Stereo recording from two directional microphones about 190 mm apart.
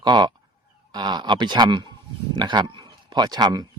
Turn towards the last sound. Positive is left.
turn(degrees=-20)  # may be behind; listen again after turning